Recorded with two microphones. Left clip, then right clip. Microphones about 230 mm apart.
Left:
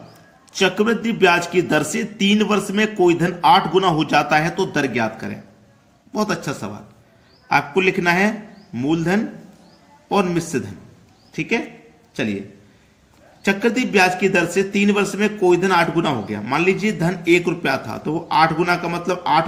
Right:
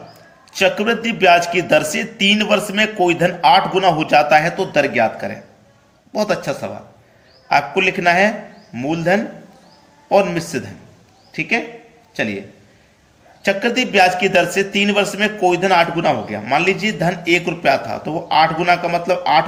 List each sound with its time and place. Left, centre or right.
0.6 s a man's voice: left
13.4 s a man's voice: left